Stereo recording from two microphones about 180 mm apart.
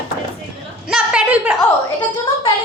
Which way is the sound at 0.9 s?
5° right (ahead or behind).